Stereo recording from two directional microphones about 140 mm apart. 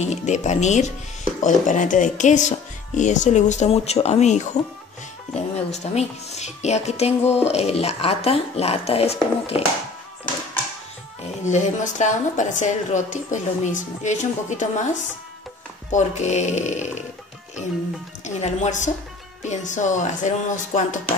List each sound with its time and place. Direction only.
0.0 s a woman's voice: 55° left (ahead or behind)
11.4 s a woman's voice: 60° left (ahead or behind)
15.9 s a woman's voice: 60° left (ahead or behind)
18.2 s a woman's voice: 60° left (ahead or behind)